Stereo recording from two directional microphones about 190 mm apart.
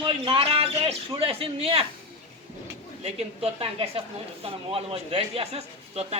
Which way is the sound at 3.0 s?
30° right (ahead or behind).